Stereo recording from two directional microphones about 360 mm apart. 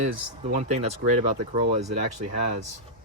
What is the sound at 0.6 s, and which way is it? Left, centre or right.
Speech, centre.